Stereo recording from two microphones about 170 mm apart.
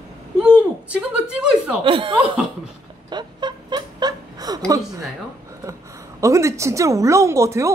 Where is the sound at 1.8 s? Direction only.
30° right (ahead or behind).